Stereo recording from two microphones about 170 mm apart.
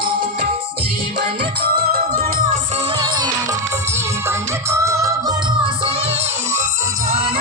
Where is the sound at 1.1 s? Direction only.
80° right; by 2.6 s 55° right (ahead or behind).